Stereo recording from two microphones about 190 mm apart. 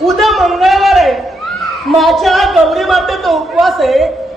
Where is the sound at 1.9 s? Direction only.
Centre (ahead or behind).